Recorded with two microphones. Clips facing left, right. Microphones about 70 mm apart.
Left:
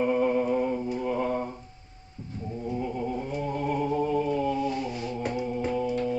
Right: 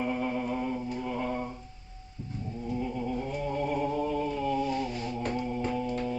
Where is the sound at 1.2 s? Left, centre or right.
Left.